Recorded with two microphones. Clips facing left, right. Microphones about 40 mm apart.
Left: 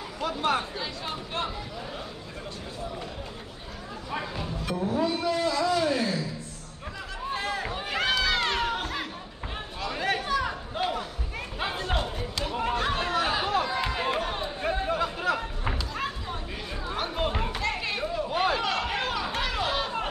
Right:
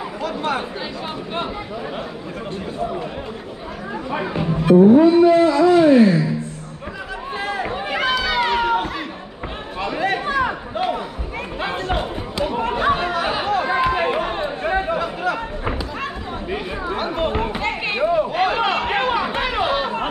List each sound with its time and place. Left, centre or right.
0.2 s chatter: centre
4.1 s a man's voice: right
7.2 s run: centre
8.1 s run: centre
10.1 s a sound: right
11.9 s chatter: right
13.7 s a sound: right
15.3 s a sound: centre
16.8 s chatter: centre
17.6 s chatter: right